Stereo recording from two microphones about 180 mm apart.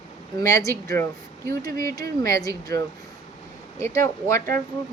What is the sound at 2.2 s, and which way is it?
Speech, 20° left (ahead or behind).